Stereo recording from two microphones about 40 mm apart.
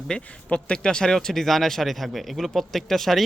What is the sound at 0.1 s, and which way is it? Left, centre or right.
Speech, left.